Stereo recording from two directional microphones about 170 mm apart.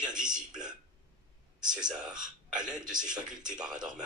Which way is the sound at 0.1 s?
5° right (ahead or behind).